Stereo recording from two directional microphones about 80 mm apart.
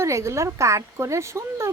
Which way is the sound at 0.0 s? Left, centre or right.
Right.